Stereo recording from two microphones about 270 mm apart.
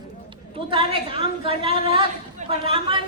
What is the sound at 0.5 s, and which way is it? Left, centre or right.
A man's voice, centre.